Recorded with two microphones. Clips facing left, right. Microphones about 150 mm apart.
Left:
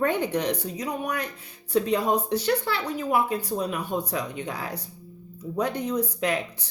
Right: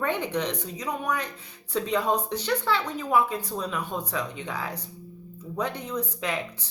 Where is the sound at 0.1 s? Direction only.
15° left (ahead or behind).